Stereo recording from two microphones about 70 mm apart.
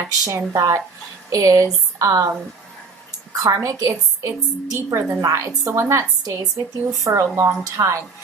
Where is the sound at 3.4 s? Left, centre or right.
Right.